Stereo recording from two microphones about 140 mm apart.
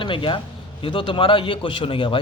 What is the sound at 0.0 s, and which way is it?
A man's voice, 35° left (ahead or behind).